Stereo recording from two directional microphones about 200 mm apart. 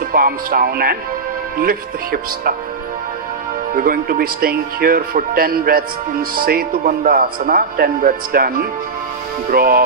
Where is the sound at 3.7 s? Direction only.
45° right (ahead or behind).